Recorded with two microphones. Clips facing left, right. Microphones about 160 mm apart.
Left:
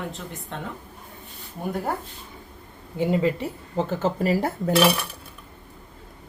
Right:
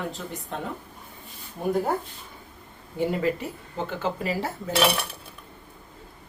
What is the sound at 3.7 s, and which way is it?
Speech, 35° left (ahead or behind).